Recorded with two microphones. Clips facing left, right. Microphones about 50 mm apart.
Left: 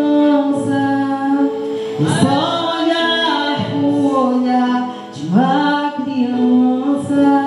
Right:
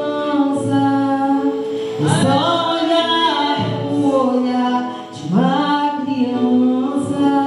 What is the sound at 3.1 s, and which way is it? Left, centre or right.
A capella, centre.